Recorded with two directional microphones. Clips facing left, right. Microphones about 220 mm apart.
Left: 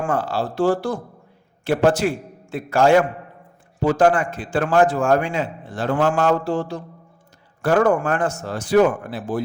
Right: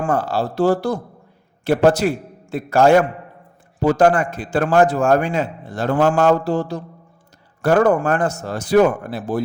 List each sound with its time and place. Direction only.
0.0 s a man's voice: 40° right (ahead or behind)